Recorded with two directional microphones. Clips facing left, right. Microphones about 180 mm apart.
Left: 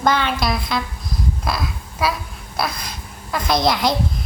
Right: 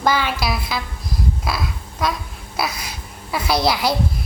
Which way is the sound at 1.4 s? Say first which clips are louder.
Left 1 dB; centre (ahead or behind).